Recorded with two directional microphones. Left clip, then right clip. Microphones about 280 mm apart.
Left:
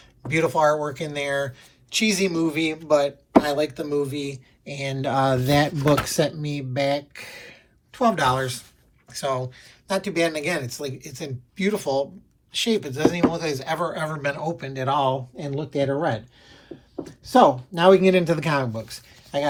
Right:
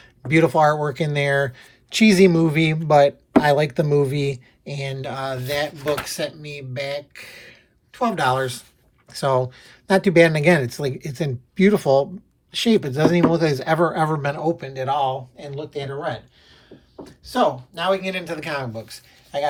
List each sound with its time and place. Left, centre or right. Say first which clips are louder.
0.3 s speech: right 3 dB; centre
17.2 s speech: left 4 dB; centre